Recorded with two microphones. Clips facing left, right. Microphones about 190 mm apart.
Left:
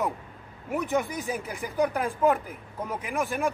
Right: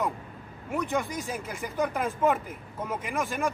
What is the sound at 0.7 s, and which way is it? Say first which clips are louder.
Speech: left 2 dB; 5° left (ahead or behind).